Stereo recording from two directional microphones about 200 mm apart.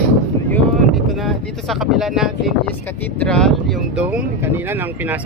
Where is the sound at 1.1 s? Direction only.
Centre (ahead or behind).